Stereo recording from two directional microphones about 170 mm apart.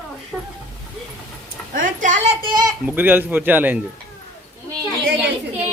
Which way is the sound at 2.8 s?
10° right (ahead or behind).